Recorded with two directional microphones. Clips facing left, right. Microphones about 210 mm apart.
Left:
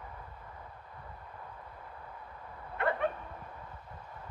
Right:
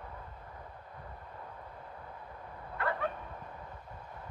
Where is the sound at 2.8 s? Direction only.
25° left (ahead or behind).